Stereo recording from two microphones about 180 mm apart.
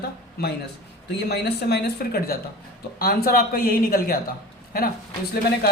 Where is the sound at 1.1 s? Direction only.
65° left (ahead or behind).